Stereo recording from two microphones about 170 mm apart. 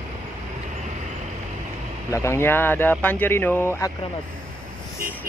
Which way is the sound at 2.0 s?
15° left (ahead or behind).